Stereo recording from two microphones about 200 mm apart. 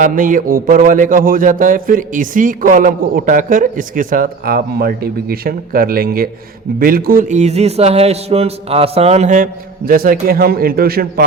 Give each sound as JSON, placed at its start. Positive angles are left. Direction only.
{"t": 0.0, "sound": "a man's voice", "side_deg": -40}